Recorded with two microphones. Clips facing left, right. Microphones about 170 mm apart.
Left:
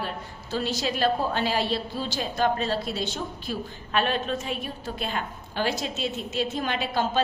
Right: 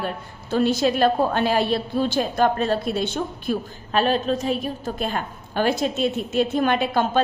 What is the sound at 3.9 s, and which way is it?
A woman's voice, 35° right (ahead or behind).